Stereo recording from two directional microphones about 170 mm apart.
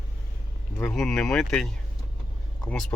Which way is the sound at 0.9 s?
Centre (ahead or behind).